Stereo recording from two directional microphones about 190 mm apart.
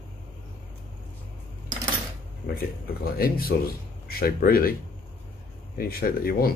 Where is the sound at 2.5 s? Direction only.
55° left (ahead or behind).